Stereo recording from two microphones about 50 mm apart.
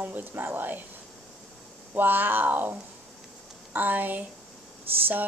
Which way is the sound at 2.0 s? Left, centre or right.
Right.